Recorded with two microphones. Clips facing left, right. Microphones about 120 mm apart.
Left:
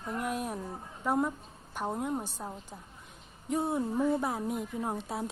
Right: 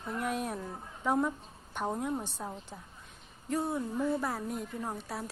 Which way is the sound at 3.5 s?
25° left (ahead or behind).